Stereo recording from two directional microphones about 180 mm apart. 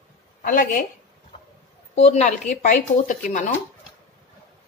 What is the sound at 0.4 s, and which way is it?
Speech, 50° left (ahead or behind).